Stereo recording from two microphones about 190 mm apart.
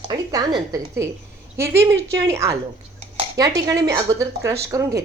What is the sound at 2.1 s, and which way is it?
A woman's voice, 15° right (ahead or behind).